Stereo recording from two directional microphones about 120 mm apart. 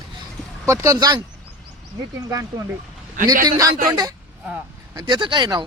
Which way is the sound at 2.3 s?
30° right (ahead or behind).